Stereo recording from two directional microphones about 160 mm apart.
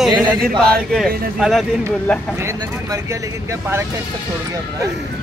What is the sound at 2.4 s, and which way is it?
Speech, 15° right (ahead or behind).